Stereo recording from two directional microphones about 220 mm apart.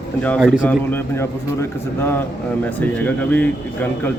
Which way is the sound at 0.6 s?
10° left (ahead or behind).